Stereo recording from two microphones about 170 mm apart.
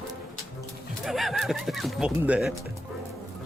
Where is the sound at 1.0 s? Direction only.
Centre (ahead or behind).